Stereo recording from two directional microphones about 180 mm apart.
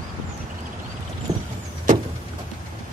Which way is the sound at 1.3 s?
20° right (ahead or behind).